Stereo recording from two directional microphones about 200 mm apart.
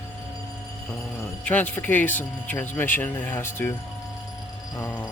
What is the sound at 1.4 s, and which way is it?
Speech, 10° left (ahead or behind).